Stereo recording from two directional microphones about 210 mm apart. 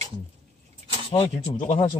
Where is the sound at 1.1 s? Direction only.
30° left (ahead or behind).